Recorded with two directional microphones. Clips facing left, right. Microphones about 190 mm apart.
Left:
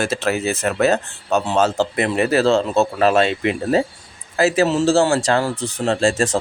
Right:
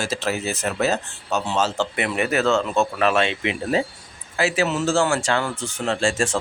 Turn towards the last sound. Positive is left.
turn(degrees=40)  # may be behind; listen again after turning